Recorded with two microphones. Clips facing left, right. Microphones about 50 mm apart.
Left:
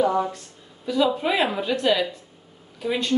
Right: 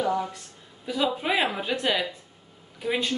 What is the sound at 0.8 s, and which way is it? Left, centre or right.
Speech, centre.